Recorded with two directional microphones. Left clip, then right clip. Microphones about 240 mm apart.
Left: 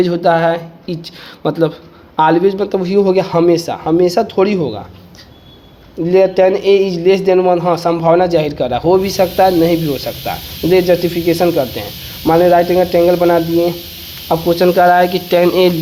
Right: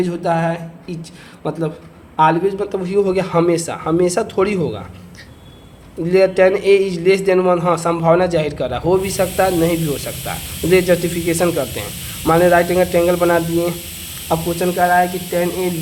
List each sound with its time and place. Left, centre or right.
0.0 s a man's voice: left; by 4.8 s centre
6.1 s a man's voice: centre
14.3 s speech: left
14.8 s speech: left